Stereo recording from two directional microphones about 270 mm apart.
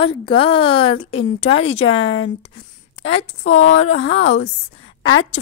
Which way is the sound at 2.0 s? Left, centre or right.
Left.